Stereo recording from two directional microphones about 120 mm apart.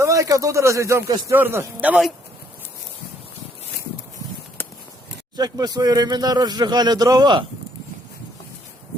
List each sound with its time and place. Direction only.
0.0 s a man's voice: 25° right (ahead or behind)
5.4 s speech: 35° right (ahead or behind)